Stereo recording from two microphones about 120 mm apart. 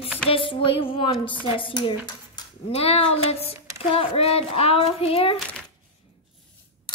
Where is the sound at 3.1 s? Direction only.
55° left (ahead or behind).